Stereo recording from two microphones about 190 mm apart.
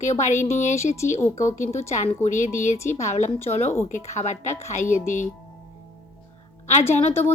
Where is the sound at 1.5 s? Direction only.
40° left (ahead or behind).